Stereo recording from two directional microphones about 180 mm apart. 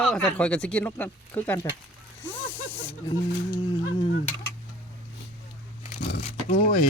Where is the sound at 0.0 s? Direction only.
Centre (ahead or behind).